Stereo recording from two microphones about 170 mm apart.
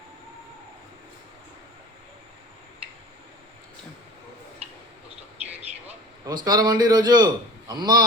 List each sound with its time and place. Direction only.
6.2 s a man's voice: 25° right (ahead or behind)